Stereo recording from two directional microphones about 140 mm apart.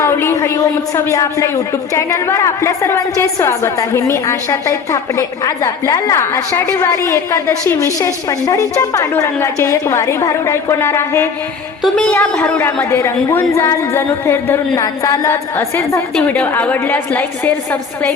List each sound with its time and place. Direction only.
0.0 s a woman's voice: 20° left (ahead or behind)
11.8 s a woman's voice: 5° left (ahead or behind)